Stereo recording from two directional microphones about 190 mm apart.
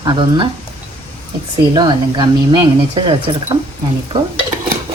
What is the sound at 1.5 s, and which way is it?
Speech, 25° right (ahead or behind).